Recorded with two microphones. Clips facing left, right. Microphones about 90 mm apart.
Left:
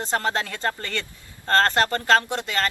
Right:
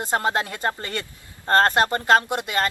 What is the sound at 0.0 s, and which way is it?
Speech, 20° right (ahead or behind).